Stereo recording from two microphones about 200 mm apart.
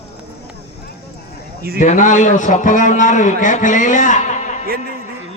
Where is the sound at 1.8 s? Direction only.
40° left (ahead or behind).